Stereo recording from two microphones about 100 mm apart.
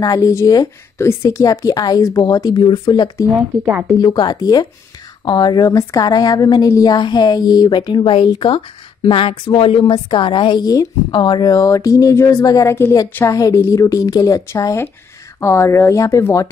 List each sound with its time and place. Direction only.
0.0 s a woman's voice: 35° left (ahead or behind); by 9.9 s 65° left (ahead or behind)
9.9 s a woman's voice: 55° left (ahead or behind); by 12.9 s 25° left (ahead or behind)
13.3 s speech: 35° left (ahead or behind)